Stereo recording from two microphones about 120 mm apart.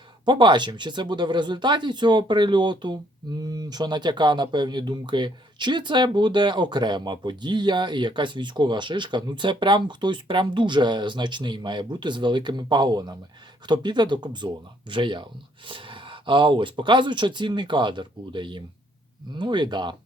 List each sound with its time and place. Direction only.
0.3 s speech: 40° right (ahead or behind)